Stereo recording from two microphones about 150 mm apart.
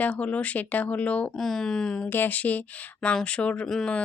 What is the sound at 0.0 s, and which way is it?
Speech, 10° left (ahead or behind).